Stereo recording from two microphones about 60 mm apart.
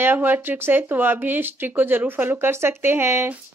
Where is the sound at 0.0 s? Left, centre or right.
Right.